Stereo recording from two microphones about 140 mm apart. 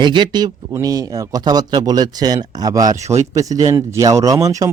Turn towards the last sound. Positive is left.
turn(degrees=-25)  # may be behind; listen again after turning